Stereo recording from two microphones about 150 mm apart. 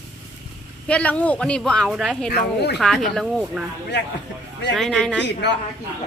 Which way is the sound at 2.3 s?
90° left.